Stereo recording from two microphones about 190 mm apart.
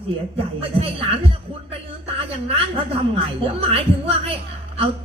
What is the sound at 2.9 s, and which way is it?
Speech, 30° right (ahead or behind).